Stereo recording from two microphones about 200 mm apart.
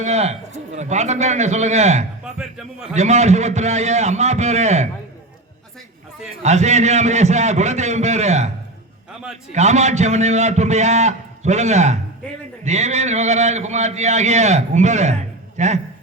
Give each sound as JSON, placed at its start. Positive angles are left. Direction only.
{"t": 0.0, "sound": "a man's voice", "side_deg": -35}
{"t": 2.2, "sound": "speech", "side_deg": -5}
{"t": 2.9, "sound": "a man's voice", "side_deg": -35}
{"t": 6.4, "sound": "a man's voice", "side_deg": -35}
{"t": 9.5, "sound": "a man's voice", "side_deg": -35}